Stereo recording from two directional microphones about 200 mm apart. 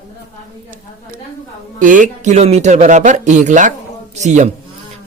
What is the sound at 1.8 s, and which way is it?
A man's voice, 40° right (ahead or behind).